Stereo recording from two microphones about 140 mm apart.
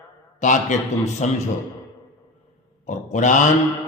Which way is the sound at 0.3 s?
60° left (ahead or behind).